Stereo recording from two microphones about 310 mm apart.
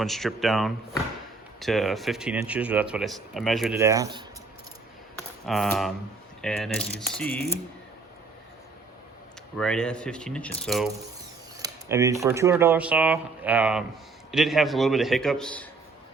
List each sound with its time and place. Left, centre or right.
0.0 s speech: centre
5.5 s speech: centre
9.6 s speech: centre